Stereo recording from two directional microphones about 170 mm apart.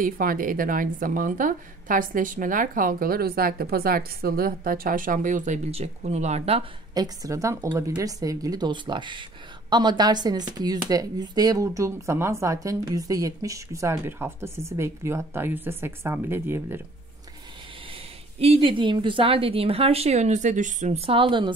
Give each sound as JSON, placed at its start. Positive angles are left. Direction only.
{"t": 0.0, "sound": "a woman's voice", "side_deg": -55}
{"t": 6.9, "sound": "a woman's voice", "side_deg": -20}
{"t": 18.4, "sound": "a woman's voice", "side_deg": -35}